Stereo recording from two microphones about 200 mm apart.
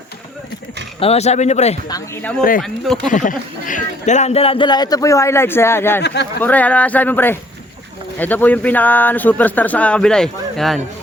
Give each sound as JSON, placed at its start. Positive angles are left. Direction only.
{"t": 0.9, "sound": "speech", "side_deg": 30}
{"t": 1.9, "sound": "speech", "side_deg": 10}
{"t": 2.6, "sound": "speech", "side_deg": 0}
{"t": 3.1, "sound": "a man's voice", "side_deg": 40}
{"t": 6.0, "sound": "speech", "side_deg": 60}
{"t": 6.4, "sound": "speech", "side_deg": 10}